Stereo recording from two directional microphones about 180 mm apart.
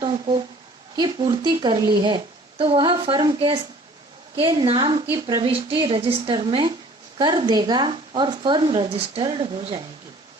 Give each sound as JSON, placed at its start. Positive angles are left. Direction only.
{"t": 0.0, "sound": "a woman's voice", "side_deg": -30}